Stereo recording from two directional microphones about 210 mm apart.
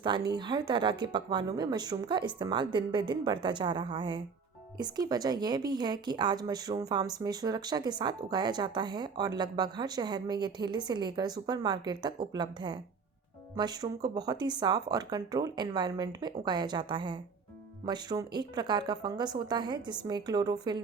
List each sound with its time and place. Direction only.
0.3 s speech: 20° right (ahead or behind)